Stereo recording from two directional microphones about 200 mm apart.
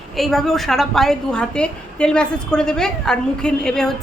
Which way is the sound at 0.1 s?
Centre (ahead or behind).